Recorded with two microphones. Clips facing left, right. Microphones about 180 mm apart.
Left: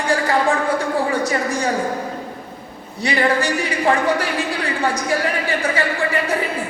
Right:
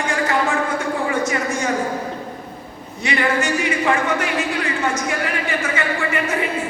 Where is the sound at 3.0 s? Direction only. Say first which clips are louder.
Left 2 dB; 35° left (ahead or behind).